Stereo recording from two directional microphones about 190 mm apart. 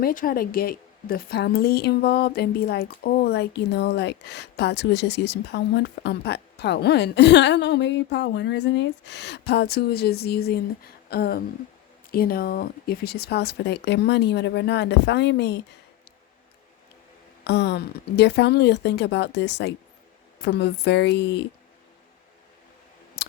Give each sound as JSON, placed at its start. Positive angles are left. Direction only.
{"t": 0.0, "sound": "a woman's voice", "side_deg": 45}
{"t": 17.4, "sound": "a woman's voice", "side_deg": 65}